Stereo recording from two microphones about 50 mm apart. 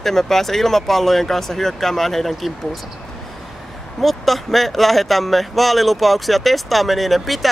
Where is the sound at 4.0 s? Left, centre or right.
Centre.